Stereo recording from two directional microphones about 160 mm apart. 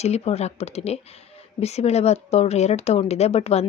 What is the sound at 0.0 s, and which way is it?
A woman's voice, 40° left (ahead or behind).